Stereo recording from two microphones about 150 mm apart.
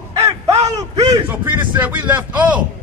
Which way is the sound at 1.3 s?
10° right (ahead or behind).